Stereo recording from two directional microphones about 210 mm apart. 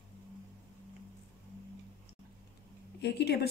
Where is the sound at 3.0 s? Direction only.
50° left (ahead or behind).